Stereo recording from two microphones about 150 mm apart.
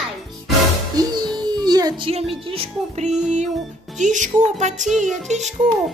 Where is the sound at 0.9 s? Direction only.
30° right (ahead or behind).